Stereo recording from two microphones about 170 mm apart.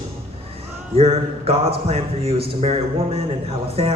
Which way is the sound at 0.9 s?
35° right (ahead or behind).